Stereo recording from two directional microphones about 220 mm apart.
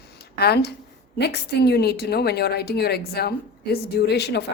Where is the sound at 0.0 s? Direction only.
45° left (ahead or behind).